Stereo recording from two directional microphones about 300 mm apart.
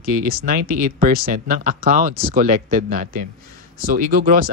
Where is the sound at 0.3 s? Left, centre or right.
Right.